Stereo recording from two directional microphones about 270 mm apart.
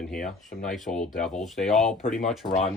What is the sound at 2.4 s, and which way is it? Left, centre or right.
Speech, centre.